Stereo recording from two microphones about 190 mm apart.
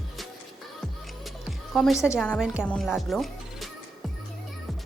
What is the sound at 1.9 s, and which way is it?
A woman's voice, 15° left (ahead or behind).